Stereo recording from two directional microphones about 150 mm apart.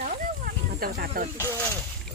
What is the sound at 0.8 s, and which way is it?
Speech, 80° right.